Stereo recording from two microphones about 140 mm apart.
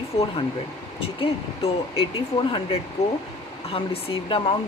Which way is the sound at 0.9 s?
40° left (ahead or behind).